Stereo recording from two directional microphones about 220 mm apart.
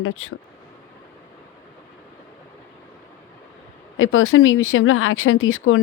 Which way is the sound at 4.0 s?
65° left (ahead or behind).